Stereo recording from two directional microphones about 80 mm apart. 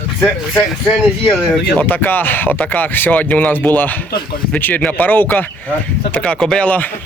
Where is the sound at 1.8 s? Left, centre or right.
Left.